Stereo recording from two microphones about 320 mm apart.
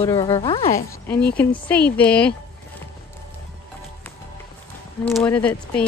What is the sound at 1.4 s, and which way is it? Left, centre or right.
Speech, centre.